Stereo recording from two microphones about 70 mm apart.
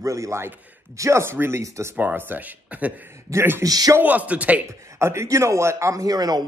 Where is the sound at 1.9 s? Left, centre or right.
Right.